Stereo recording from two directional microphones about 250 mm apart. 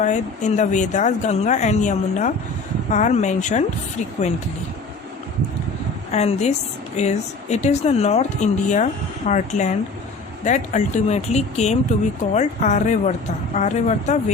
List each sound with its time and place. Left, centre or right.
0.0 s speech: left
6.1 s speech: left